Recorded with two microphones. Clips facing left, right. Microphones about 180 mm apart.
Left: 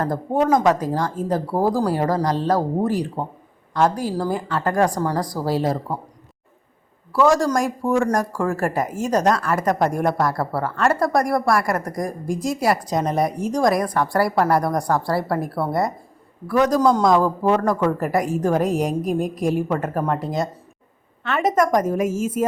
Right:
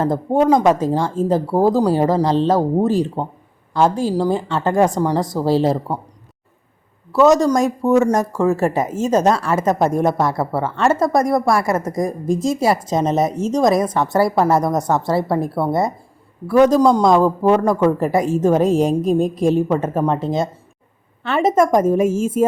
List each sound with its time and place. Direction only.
0.0 s a woman's voice: 25° right (ahead or behind)
7.1 s a woman's voice: 20° right (ahead or behind)